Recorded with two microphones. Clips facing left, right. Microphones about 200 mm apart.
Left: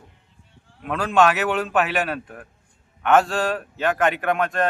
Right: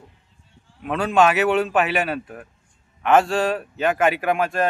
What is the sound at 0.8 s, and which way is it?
A man's voice, centre (ahead or behind).